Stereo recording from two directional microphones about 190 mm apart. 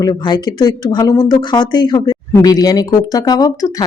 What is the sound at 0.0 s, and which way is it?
Speech, 20° left (ahead or behind).